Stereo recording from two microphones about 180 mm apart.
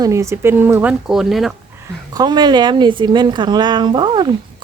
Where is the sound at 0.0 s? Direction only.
15° right (ahead or behind).